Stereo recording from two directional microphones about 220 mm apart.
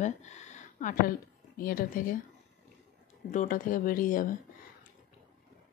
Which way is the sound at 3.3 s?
35° left (ahead or behind).